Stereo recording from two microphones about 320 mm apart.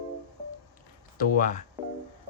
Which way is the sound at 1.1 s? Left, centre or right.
Left.